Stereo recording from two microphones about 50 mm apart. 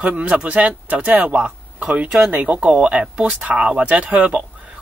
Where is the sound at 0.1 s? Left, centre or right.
Right.